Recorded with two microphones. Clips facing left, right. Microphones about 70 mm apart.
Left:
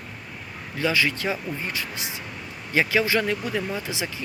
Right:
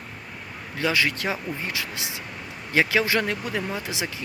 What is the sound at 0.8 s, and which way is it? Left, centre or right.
Speech, right.